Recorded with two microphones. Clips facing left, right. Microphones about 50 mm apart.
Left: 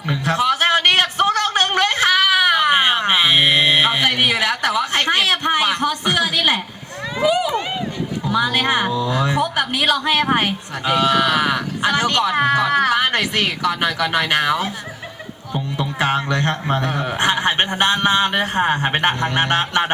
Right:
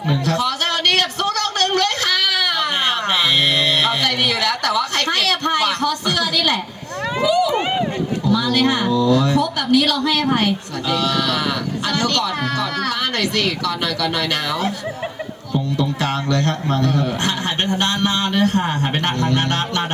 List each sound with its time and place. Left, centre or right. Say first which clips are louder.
0.1 s a sound: left 2 dB; left
7.2 s speech: right 1 dB; left
7.5 s speech: right 3 dB; right
8.2 s speech: right 1 dB; left